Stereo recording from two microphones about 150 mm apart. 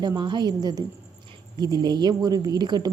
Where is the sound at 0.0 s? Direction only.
30° right (ahead or behind).